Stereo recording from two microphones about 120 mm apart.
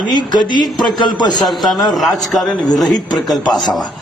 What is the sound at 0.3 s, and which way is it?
Speech, centre (ahead or behind).